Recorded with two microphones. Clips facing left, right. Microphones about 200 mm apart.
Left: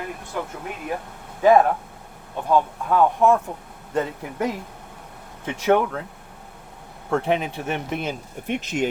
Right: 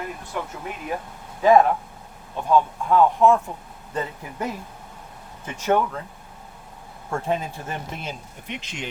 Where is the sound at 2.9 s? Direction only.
55° left (ahead or behind).